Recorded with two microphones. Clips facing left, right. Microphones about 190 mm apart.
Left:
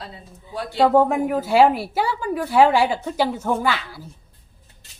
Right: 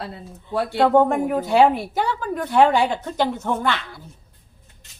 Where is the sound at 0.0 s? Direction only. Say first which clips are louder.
Right 5 dB; 60° right (ahead or behind).